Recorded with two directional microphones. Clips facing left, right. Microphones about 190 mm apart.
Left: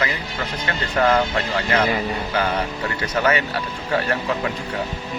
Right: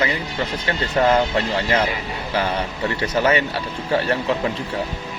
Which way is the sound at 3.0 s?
30° right (ahead or behind).